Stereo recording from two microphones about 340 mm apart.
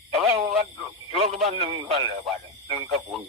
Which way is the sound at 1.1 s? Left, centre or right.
Centre.